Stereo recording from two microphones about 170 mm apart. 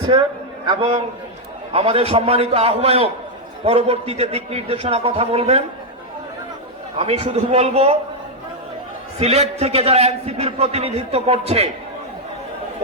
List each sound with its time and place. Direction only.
0.1 s a man's voice: 30° right (ahead or behind)
6.9 s a man's voice: 40° right (ahead or behind)
9.2 s a man's voice: 40° right (ahead or behind)